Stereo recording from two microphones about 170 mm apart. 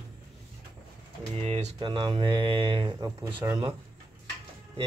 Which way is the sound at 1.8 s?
30° right (ahead or behind).